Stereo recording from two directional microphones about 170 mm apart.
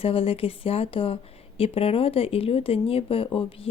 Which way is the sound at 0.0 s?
35° left (ahead or behind).